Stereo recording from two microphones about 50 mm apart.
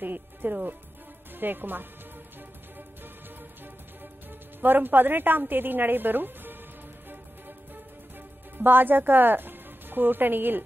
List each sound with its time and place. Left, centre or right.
0.0 s a woman's voice: right
4.6 s a woman's voice: right
7.1 s music: right
8.5 s speech: right